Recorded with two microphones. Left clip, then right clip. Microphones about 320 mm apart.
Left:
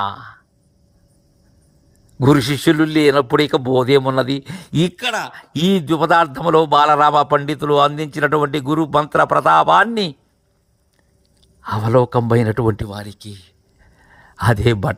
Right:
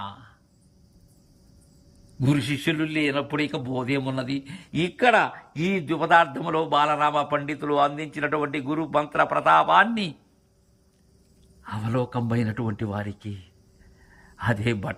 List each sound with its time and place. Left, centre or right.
0.0 s speech: centre
2.2 s a man's voice: centre
11.6 s speech: centre
14.4 s a man's voice: centre